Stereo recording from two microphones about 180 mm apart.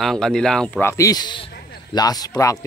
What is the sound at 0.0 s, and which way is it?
A man's voice, centre (ahead or behind).